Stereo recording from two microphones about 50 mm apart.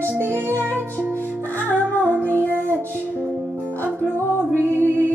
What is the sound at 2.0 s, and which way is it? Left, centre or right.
Music, right.